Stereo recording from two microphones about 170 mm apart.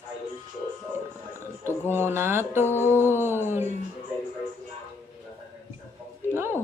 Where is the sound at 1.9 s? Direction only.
15° right (ahead or behind).